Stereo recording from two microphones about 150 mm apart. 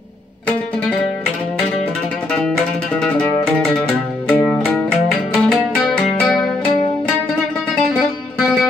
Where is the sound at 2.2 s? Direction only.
5° left (ahead or behind).